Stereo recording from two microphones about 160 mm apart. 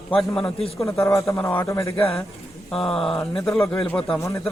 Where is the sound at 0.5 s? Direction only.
40° left (ahead or behind).